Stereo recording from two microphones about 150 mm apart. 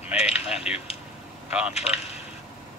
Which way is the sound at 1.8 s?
45° left (ahead or behind).